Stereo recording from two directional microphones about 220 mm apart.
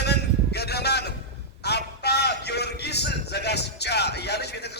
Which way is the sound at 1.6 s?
50° left (ahead or behind).